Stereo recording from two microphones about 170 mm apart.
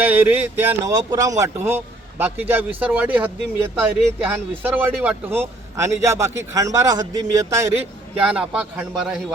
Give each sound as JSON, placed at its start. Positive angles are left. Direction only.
{"t": 0.0, "sound": "speech", "side_deg": -10}
{"t": 8.2, "sound": "a man's voice", "side_deg": -5}